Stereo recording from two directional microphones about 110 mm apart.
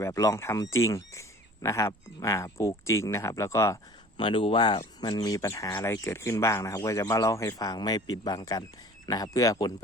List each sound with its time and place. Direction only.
0.0 s speech: 30° left (ahead or behind)
4.2 s speech: 50° left (ahead or behind)
4.8 s speech: 35° left (ahead or behind)